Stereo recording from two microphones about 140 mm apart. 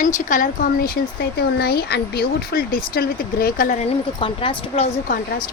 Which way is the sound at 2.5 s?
90° left.